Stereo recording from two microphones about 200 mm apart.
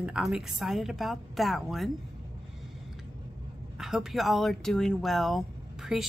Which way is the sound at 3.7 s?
Centre (ahead or behind).